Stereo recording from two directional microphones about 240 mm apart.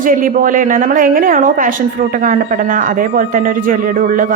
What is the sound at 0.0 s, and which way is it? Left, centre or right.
A woman's voice, right.